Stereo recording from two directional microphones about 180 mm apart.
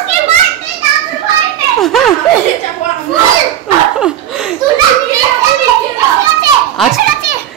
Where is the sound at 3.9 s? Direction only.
5° right (ahead or behind).